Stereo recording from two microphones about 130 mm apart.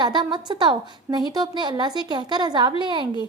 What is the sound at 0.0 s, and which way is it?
A woman's voice, 35° right (ahead or behind).